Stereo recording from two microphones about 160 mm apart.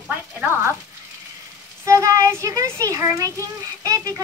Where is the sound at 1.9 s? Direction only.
20° right (ahead or behind).